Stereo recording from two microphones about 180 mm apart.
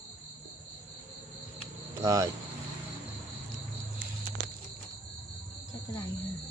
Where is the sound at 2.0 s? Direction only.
15° right (ahead or behind).